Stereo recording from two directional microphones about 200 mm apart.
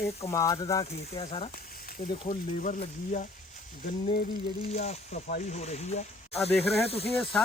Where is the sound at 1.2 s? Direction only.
30° left (ahead or behind).